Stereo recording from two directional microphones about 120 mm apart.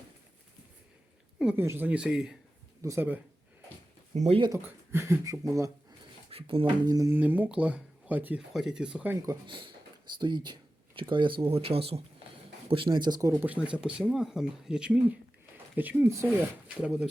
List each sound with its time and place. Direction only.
1.5 s speech: 20° right (ahead or behind)
2.8 s speech: 20° right (ahead or behind)
4.1 s speech: 70° right (ahead or behind)
4.6 s speech: 20° right (ahead or behind)
6.3 s speech: 50° right (ahead or behind)
6.8 s speech: 30° right (ahead or behind)
7.1 s speech: 15° right (ahead or behind)
9.5 s speech: 40° right (ahead or behind)
13.3 s speech: 15° right (ahead or behind)